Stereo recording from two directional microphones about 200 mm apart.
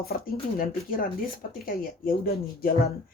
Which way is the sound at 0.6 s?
45° left (ahead or behind).